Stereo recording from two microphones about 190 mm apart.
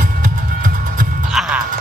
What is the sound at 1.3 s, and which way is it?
Music, 5° right (ahead or behind).